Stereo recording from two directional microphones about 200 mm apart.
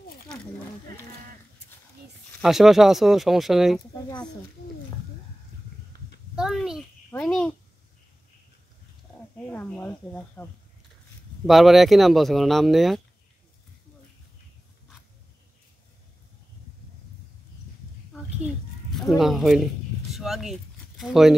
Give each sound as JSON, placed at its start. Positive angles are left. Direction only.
{"t": 2.4, "sound": "speech", "side_deg": 0}
{"t": 3.9, "sound": "speech", "side_deg": 20}
{"t": 6.3, "sound": "a sound", "side_deg": 0}
{"t": 7.1, "sound": "speech", "side_deg": 5}
{"t": 9.5, "sound": "speech", "side_deg": 10}
{"t": 11.4, "sound": "speech", "side_deg": 0}
{"t": 18.9, "sound": "speech", "side_deg": 0}